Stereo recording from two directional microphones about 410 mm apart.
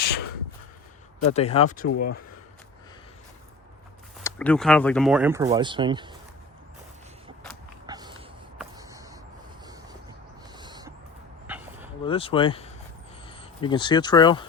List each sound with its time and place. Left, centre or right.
0.0 s a sound: left
1.3 s speech: centre
1.9 s speech: left
4.2 s speech: centre
7.9 s a sound: centre
10.5 s owl: centre
11.4 s dog: centre
12.0 s speech: centre